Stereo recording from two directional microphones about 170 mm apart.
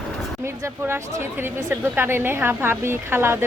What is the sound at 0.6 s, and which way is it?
A woman's voice, 15° right (ahead or behind).